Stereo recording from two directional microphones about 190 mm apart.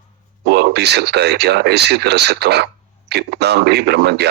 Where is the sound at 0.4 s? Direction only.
60° right (ahead or behind).